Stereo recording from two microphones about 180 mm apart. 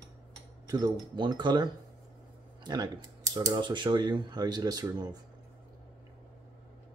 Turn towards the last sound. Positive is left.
turn(degrees=-20)  # may be behind; listen again after turning